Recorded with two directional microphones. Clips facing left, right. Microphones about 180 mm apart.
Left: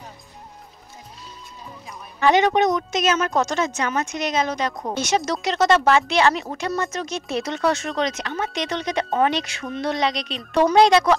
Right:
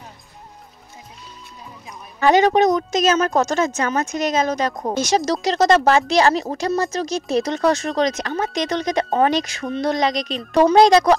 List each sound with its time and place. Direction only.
2.1 s a woman's voice: 40° right (ahead or behind)